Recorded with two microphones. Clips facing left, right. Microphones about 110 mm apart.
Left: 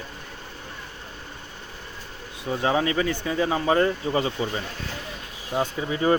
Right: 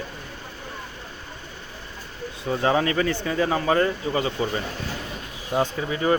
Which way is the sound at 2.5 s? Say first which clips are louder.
Right 1 dB; 10° left (ahead or behind).